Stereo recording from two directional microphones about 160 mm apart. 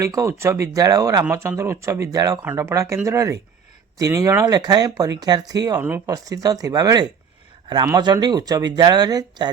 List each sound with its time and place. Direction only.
0.0 s speech: 20° right (ahead or behind)